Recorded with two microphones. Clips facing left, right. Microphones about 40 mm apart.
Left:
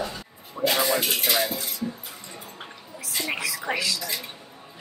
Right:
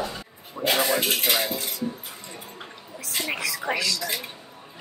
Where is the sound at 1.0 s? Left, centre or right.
Right.